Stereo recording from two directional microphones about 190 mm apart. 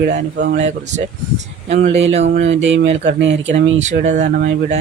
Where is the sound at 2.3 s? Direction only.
35° right (ahead or behind).